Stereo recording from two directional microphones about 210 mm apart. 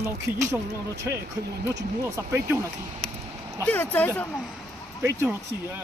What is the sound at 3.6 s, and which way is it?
Speech, 10° left (ahead or behind).